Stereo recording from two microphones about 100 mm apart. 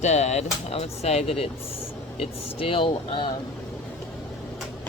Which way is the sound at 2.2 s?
70° left (ahead or behind).